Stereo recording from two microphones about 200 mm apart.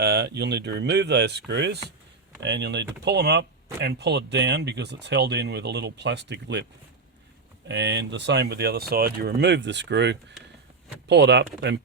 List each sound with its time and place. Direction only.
0.0 s speech: 55° right (ahead or behind)
7.7 s speech: 60° right (ahead or behind)